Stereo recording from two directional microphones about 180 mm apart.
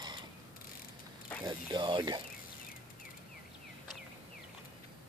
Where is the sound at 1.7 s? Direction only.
25° right (ahead or behind).